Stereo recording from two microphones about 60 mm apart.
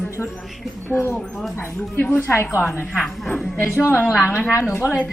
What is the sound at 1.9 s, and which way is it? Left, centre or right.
Speech, left.